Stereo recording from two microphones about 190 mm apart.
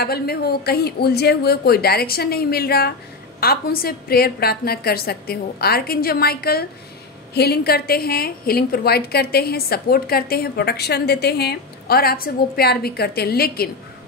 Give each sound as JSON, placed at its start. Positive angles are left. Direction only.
{"t": 0.0, "sound": "a woman's voice", "side_deg": 55}